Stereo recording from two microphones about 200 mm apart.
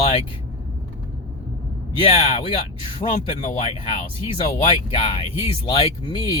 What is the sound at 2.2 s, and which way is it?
Speech, 25° left (ahead or behind).